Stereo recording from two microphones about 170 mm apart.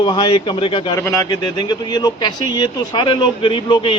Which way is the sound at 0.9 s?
20° left (ahead or behind).